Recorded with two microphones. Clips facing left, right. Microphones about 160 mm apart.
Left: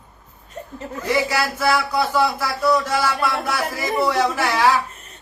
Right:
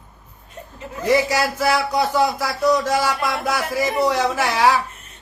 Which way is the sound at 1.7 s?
15° right (ahead or behind).